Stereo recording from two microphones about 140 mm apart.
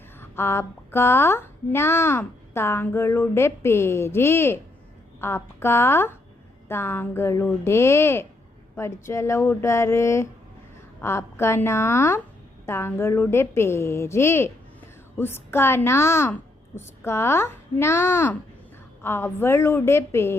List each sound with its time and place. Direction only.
0.2 s speech: 20° left (ahead or behind)